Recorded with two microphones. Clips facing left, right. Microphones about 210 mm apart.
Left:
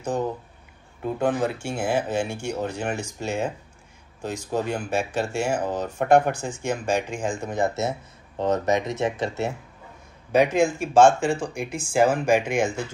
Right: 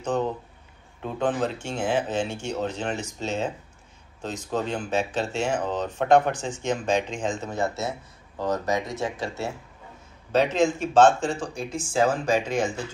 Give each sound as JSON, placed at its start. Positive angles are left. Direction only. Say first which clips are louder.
{"t": 0.0, "sound": "speech", "louder": "even", "side_deg": 10}